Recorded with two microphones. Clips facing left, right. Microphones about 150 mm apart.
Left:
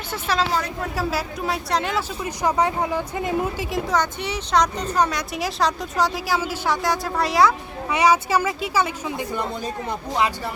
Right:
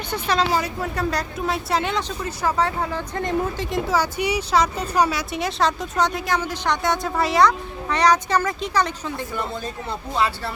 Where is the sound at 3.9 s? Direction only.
10° right (ahead or behind); by 10.3 s 15° left (ahead or behind).